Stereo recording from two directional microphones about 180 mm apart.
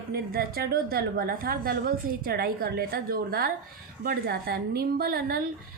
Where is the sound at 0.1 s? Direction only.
55° right (ahead or behind).